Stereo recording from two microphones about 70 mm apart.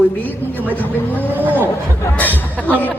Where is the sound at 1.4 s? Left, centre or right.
Right.